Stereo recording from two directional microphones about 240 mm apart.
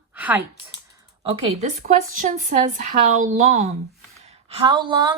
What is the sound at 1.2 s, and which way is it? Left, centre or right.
A woman's voice, right.